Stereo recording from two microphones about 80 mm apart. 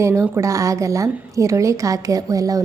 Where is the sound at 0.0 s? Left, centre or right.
Right.